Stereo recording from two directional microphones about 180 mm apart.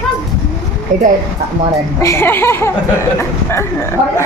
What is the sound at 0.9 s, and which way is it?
Speech, 45° right (ahead or behind).